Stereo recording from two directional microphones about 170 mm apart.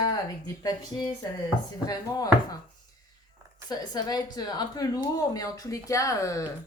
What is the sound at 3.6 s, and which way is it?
A woman's voice, 25° left (ahead or behind).